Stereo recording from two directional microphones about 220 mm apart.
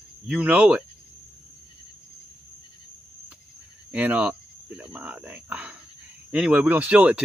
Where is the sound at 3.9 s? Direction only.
5° right (ahead or behind).